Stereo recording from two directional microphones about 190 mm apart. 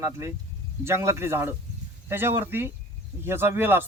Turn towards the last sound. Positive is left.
turn(degrees=-10)  # may be behind; listen again after turning